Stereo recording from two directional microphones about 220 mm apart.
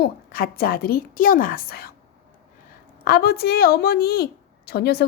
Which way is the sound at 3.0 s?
45° left (ahead or behind).